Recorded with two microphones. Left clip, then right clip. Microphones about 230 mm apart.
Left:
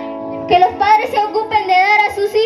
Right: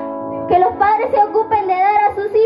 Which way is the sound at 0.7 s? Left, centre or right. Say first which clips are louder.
Left 1 dB; left.